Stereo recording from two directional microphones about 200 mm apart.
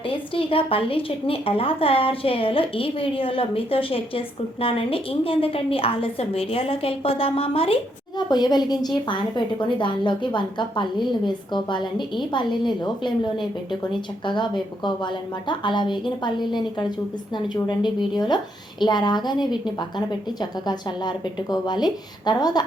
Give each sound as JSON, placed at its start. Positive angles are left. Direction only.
{"t": 0.1, "sound": "a woman's voice", "side_deg": 25}